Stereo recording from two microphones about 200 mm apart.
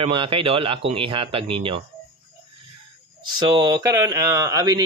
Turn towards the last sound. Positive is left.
turn(degrees=-20)  # may be behind; listen again after turning